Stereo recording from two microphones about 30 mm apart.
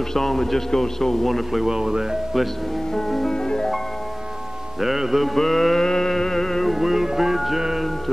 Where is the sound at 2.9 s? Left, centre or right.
Centre.